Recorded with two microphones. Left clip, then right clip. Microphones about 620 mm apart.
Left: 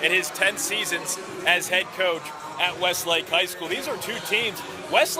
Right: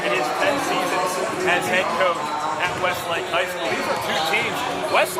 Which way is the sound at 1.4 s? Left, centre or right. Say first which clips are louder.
Right 1 dB; left.